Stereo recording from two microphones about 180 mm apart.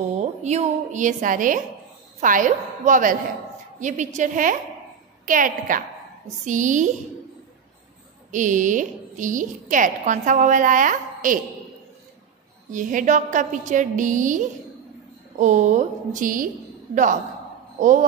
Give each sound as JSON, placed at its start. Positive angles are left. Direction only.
{"t": 0.4, "sound": "a woman's voice", "side_deg": -40}
{"t": 8.3, "sound": "a woman's voice", "side_deg": -45}
{"t": 12.7, "sound": "a woman's voice", "side_deg": -45}